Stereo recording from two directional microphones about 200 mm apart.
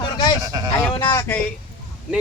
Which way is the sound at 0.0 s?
20° left (ahead or behind).